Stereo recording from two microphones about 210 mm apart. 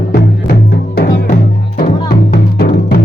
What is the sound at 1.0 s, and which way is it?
Music, 45° left (ahead or behind).